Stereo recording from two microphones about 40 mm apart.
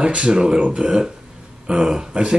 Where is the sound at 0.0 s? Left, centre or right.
Right.